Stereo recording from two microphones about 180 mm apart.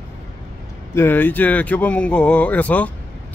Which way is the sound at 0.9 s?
10° left (ahead or behind).